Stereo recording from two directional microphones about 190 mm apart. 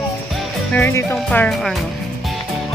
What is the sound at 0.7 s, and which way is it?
Speech, 10° left (ahead or behind).